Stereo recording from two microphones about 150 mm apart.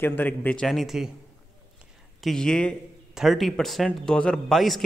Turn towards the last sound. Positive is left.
turn(degrees=0)  # may be behind; listen again after turning